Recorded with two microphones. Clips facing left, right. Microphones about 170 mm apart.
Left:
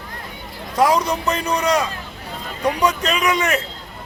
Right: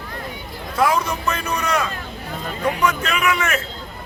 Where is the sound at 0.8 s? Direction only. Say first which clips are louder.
Left 3 dB; 35° left (ahead or behind).